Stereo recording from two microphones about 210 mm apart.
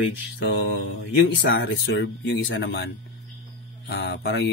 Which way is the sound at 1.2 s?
55° left (ahead or behind).